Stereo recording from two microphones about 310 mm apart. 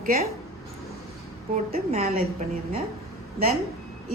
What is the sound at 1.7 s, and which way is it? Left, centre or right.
Speech, right.